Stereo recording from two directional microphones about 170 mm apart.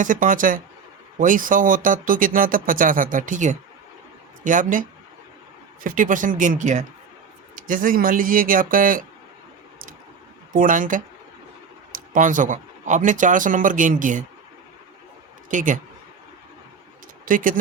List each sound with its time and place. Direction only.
0.0 s speech: 50° right (ahead or behind)
10.5 s speech: 50° right (ahead or behind)
15.4 s speech: 50° right (ahead or behind)
17.2 s speech: 55° right (ahead or behind)